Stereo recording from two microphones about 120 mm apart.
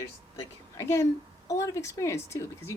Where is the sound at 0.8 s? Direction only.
25° left (ahead or behind).